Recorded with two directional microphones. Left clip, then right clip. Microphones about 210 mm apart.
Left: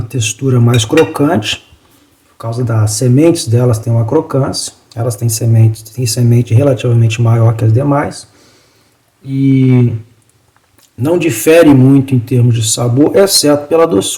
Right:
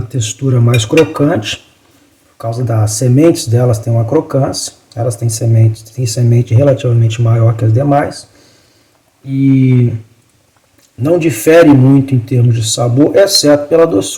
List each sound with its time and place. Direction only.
0.1 s speech: 30° left (ahead or behind)
9.2 s speech: 15° left (ahead or behind)
11.0 s speech: 25° left (ahead or behind)